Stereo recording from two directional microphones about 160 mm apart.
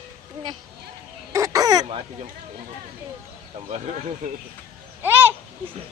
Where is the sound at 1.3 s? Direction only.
20° right (ahead or behind).